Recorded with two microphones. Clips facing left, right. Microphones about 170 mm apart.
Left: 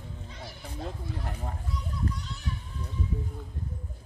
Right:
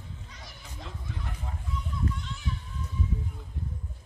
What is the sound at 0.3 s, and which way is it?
Children playing, 30° left (ahead or behind).